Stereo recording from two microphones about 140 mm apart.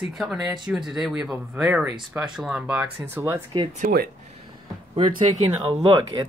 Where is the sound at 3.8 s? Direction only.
90° right.